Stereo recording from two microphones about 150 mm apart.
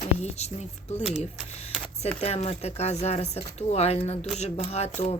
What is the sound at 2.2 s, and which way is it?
Speech, 45° left (ahead or behind).